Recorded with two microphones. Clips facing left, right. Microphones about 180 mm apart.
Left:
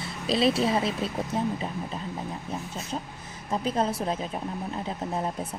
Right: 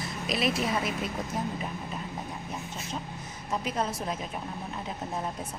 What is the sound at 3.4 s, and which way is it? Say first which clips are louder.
Speech: left 4 dB; 30° left (ahead or behind).